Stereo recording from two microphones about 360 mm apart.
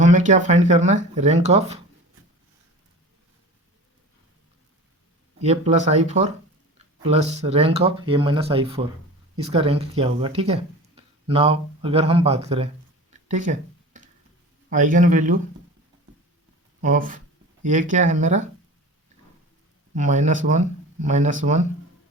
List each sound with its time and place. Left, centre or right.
0.0 s speech: centre
5.4 s speech: centre
13.2 s a sound: centre
14.7 s speech: right
16.8 s speech: right
20.0 s speech: centre